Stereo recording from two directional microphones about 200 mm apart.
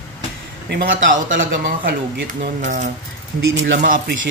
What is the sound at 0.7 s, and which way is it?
Speech, 50° right (ahead or behind).